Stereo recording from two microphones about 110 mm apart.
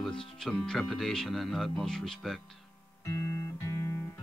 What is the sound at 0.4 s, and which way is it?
Speech, 5° left (ahead or behind).